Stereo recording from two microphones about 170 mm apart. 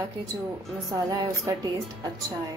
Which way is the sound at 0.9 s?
20° right (ahead or behind).